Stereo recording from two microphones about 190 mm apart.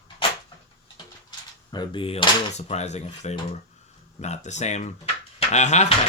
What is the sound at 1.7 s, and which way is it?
Speech, 25° left (ahead or behind).